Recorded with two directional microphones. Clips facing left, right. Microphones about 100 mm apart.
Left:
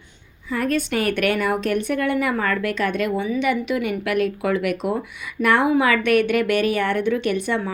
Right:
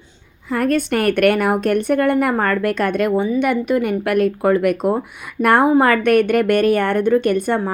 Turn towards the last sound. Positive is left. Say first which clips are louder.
# right 5 dB
turn(degrees=-50)  # may be behind; listen again after turning